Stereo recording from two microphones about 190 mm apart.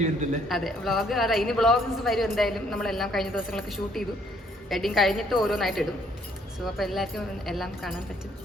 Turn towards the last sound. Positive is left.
turn(degrees=0)  # may be behind; listen again after turning